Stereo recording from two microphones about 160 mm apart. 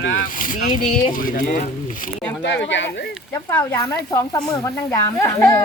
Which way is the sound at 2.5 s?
90° left.